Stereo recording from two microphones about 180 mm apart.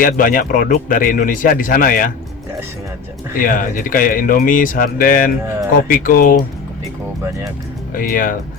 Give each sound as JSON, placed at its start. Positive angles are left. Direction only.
{"t": 0.0, "sound": "a man's voice", "side_deg": 50}
{"t": 3.4, "sound": "a man's voice", "side_deg": 50}
{"t": 7.9, "sound": "a man's voice", "side_deg": 50}